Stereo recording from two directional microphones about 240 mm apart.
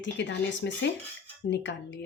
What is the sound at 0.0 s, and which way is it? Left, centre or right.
A woman's voice, left.